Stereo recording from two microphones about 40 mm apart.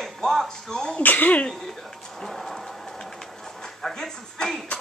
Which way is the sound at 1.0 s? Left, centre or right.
Left.